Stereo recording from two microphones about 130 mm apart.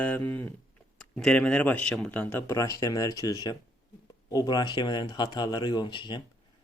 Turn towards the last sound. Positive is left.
turn(degrees=35)  # may be behind; listen again after turning